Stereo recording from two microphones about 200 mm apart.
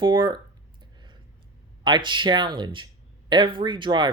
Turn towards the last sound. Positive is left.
turn(degrees=-25)  # may be behind; listen again after turning